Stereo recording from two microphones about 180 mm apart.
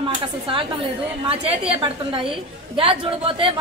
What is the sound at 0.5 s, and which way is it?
Speech, 30° right (ahead or behind).